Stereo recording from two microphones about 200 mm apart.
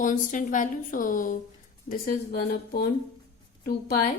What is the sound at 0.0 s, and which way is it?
A woman's voice, 40° left (ahead or behind).